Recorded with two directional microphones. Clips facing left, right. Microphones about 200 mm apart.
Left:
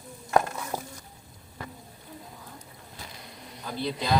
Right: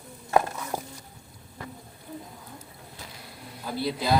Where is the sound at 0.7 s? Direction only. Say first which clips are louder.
Right 1 dB; 10° right (ahead or behind).